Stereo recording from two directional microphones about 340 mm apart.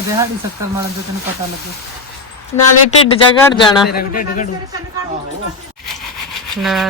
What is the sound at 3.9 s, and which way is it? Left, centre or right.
Speech, left.